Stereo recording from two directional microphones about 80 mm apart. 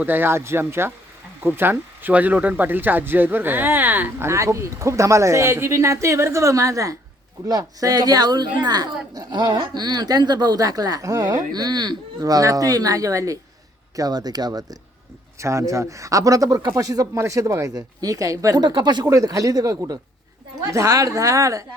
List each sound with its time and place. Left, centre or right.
0.0 s speech: right
4.3 s a woman's voice: right
15.4 s a woman's voice: right
18.6 s speech: right
19.1 s a woman's voice: right